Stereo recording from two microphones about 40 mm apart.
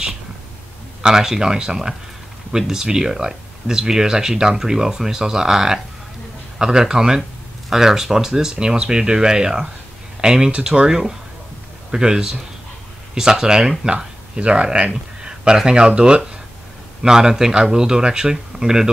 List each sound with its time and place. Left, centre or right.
1.0 s speech: centre